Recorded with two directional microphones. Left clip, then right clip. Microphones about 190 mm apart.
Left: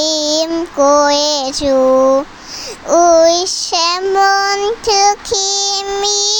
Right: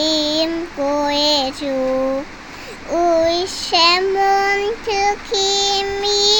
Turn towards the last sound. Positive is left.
turn(degrees=50)  # may be behind; listen again after turning